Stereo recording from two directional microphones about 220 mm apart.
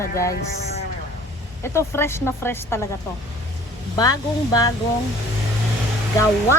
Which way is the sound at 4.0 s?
15° left (ahead or behind).